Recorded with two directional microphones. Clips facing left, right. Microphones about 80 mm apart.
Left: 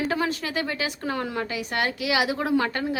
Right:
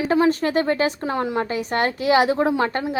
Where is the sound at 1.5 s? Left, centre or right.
Right.